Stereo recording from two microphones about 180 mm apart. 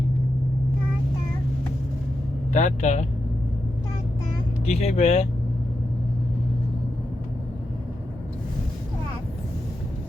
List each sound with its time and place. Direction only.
2.5 s speech: 40° left (ahead or behind)
4.6 s speech: 35° left (ahead or behind)